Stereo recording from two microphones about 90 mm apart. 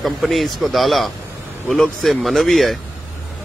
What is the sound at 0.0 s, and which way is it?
Speech, centre (ahead or behind).